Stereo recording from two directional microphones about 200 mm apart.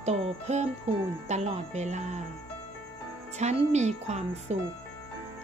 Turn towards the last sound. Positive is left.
turn(degrees=-35)  # may be behind; listen again after turning